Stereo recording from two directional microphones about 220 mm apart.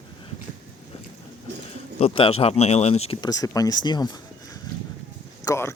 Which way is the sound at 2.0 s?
25° left (ahead or behind).